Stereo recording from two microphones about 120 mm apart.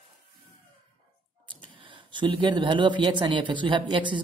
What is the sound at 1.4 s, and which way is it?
Speech, 40° right (ahead or behind).